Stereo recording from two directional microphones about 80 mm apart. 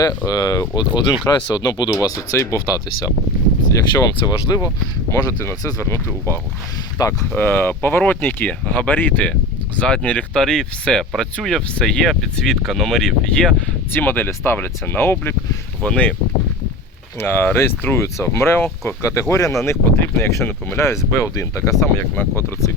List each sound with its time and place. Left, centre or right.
0.0 s speech: left
1.3 s speech: left
1.6 s speech: left
3.6 s speech: left
5.1 s speech: left
7.0 s speech: left
7.3 s speech: left; by 13.6 s centre
13.9 s speech: left
15.8 s speech: centre
17.2 s speech: left
19.3 s speech: left
19.6 s speech: left
21.9 s speech: left